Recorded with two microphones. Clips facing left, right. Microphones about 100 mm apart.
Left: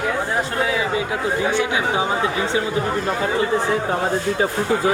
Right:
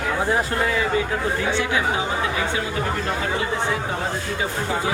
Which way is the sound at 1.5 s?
20° left (ahead or behind).